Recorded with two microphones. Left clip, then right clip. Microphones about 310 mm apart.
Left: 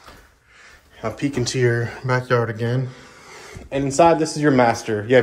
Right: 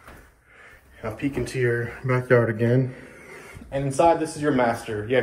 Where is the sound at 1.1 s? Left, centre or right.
Left.